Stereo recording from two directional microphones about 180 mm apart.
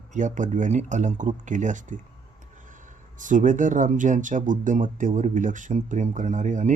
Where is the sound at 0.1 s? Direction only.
45° right (ahead or behind).